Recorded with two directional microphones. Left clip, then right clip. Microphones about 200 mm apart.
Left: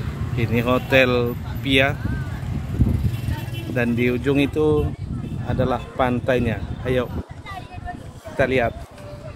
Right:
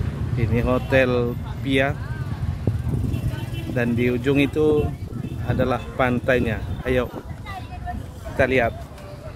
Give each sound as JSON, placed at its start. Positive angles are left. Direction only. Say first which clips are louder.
{"t": 0.4, "sound": "speech", "louder": "left 2 dB", "side_deg": 5}
{"t": 3.7, "sound": "speech", "louder": "left 1 dB", "side_deg": 5}
{"t": 8.4, "sound": "speech", "louder": "even", "side_deg": 5}